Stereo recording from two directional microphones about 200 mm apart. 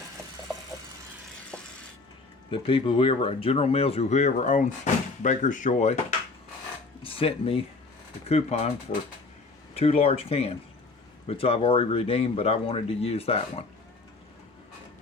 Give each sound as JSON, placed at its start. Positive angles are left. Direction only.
{"t": 2.5, "sound": "speech", "side_deg": 25}
{"t": 9.7, "sound": "speech", "side_deg": 30}